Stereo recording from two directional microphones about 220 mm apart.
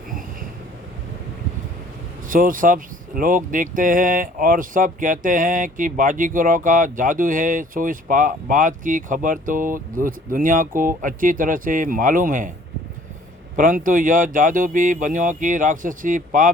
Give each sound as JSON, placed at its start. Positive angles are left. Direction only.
{"t": 2.3, "sound": "speech", "side_deg": -40}
{"t": 13.6, "sound": "speech", "side_deg": -40}